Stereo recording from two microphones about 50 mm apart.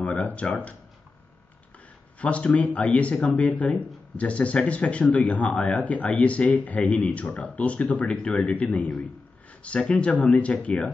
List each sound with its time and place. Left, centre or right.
0.0 s speech: left
2.1 s speech: left